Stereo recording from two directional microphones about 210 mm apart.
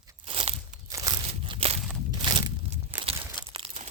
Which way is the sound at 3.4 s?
25° right (ahead or behind).